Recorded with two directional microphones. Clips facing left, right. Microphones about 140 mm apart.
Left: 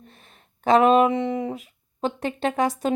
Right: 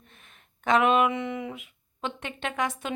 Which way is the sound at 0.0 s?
35° left (ahead or behind).